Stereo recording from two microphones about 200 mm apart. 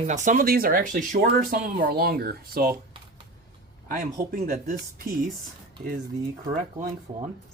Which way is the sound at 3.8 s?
45° right (ahead or behind).